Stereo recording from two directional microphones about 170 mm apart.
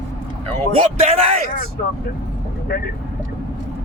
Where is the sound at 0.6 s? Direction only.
45° right (ahead or behind).